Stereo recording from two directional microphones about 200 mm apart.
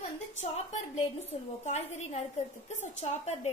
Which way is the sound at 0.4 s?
35° left (ahead or behind).